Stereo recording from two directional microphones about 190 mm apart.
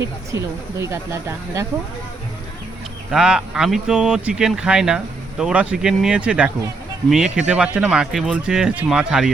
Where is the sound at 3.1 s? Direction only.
5° right (ahead or behind).